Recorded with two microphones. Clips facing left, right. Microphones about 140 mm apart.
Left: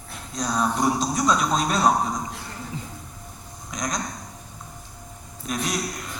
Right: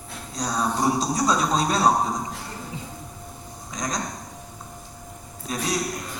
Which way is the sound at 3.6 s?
35° right (ahead or behind).